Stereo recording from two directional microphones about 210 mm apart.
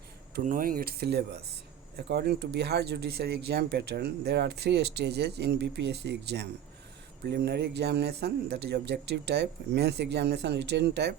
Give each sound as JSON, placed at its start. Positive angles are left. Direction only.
{"t": 0.3, "sound": "speech", "side_deg": -40}